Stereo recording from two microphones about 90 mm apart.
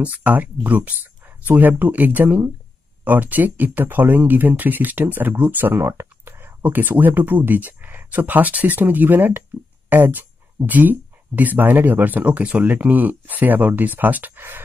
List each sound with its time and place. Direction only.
0.0 s speech: 15° right (ahead or behind)